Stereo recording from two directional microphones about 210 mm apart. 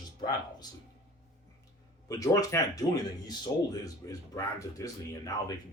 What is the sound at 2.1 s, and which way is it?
Speech, 15° left (ahead or behind).